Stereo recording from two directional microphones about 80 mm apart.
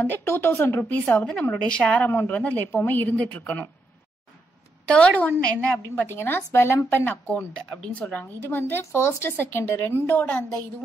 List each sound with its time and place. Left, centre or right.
0.0 s speech: left
4.8 s speech: centre
5.9 s a woman's voice: left
7.1 s speech: centre